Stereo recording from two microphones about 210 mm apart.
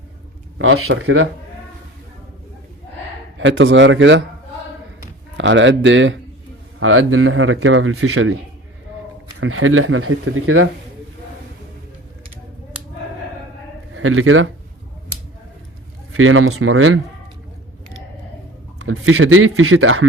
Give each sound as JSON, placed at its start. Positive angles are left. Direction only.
{"t": 0.6, "sound": "speech", "side_deg": -80}
{"t": 3.3, "sound": "a man's voice", "side_deg": -65}
{"t": 5.4, "sound": "a man's voice", "side_deg": -60}
{"t": 6.7, "sound": "speech", "side_deg": -75}
{"t": 9.4, "sound": "speech", "side_deg": -75}
{"t": 13.9, "sound": "a man's voice", "side_deg": -80}
{"t": 16.1, "sound": "speech", "side_deg": -80}
{"t": 18.8, "sound": "speech", "side_deg": -85}